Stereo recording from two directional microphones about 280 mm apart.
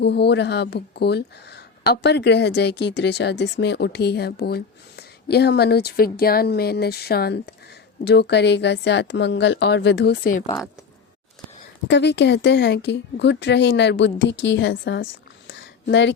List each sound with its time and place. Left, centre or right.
0.0 s speech: left
11.9 s speech: left
15.4 s a sound: left